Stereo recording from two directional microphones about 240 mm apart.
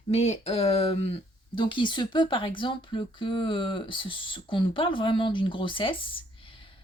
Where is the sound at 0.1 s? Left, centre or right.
Left.